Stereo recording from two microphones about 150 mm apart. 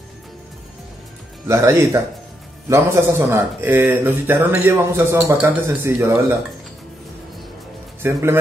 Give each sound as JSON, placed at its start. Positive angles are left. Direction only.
{"t": 1.5, "sound": "speech", "side_deg": -20}
{"t": 8.0, "sound": "speech", "side_deg": -15}